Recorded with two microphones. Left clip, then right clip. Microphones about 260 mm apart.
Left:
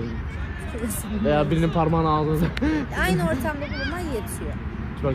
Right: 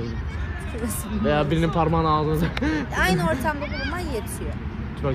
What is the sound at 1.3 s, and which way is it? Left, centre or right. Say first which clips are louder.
Speech: even; right.